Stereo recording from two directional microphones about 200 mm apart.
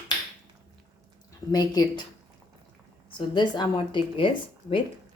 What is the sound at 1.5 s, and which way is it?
Speech, 20° left (ahead or behind).